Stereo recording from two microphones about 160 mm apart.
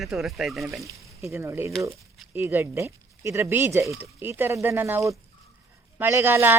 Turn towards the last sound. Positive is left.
turn(degrees=-15)  # may be behind; listen again after turning